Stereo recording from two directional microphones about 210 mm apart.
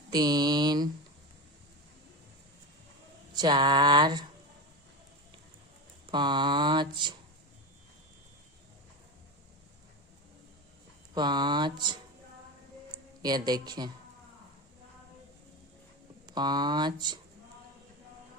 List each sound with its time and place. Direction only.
0.1 s speech: 20° right (ahead or behind)
3.3 s speech: 20° right (ahead or behind)
6.1 s speech: 20° right (ahead or behind)
11.1 s speech: 20° right (ahead or behind)
16.2 s speech: 20° right (ahead or behind)